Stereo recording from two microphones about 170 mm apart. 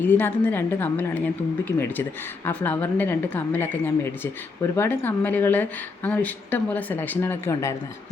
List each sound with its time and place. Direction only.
0.0 s a woman's voice: 10° left (ahead or behind)